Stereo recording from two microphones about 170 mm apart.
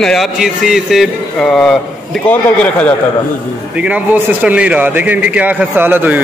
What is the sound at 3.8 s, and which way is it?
Speech, 10° right (ahead or behind).